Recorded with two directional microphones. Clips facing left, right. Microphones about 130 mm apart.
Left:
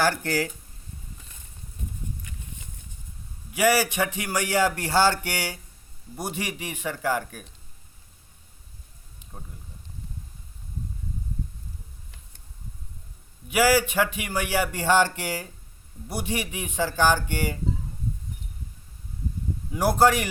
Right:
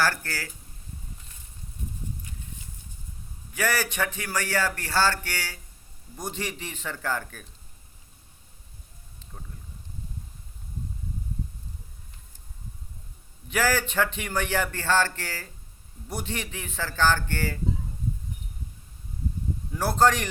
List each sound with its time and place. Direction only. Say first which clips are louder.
0.0 s speech: left 4 dB; 15° left (ahead or behind)
3.5 s speech: left 6 dB; 10° left (ahead or behind)
13.5 s speech: left 5 dB; 10° left (ahead or behind)
19.7 s speech: left 2 dB; 10° left (ahead or behind)